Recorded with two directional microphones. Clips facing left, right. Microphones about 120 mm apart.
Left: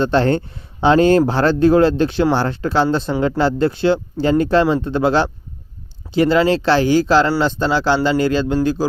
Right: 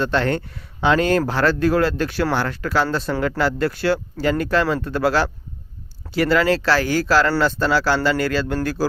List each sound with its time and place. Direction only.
0.0 s speech: 30° left (ahead or behind)